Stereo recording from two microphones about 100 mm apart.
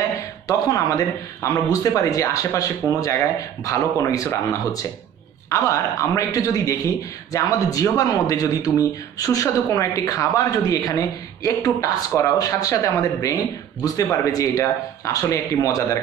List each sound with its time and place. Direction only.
0.5 s speech: 35° left (ahead or behind)